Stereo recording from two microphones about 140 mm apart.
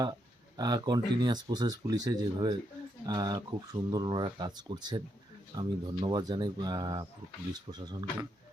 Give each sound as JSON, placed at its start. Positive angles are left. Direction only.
{"t": 0.0, "sound": "speech", "side_deg": -30}